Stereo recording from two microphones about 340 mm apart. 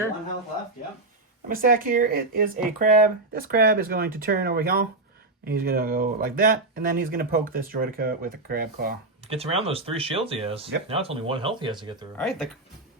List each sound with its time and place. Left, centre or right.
1.5 s speech: right
12.1 s speech: centre